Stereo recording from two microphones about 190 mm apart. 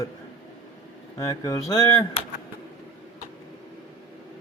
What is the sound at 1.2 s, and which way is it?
Speech, 20° left (ahead or behind).